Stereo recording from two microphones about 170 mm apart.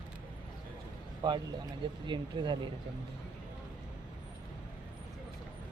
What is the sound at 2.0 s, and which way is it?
Speech, 25° right (ahead or behind).